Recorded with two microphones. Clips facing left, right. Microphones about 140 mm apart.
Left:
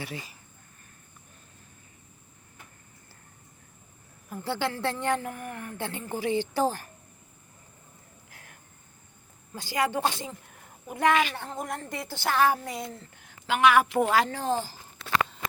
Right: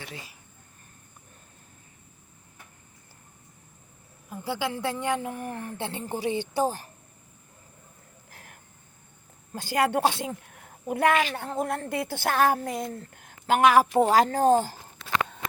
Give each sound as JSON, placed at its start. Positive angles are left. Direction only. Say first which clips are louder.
{"t": 4.3, "sound": "a woman's voice", "louder": "even", "side_deg": -10}
{"t": 5.4, "sound": "a woman's voice", "louder": "right 2 dB", "side_deg": -30}
{"t": 9.5, "sound": "a woman's voice", "louder": "right 3 dB", "side_deg": -50}